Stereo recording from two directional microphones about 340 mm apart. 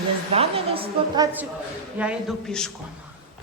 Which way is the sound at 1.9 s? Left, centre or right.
Centre.